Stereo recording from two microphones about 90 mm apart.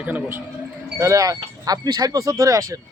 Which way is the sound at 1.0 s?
40° right (ahead or behind).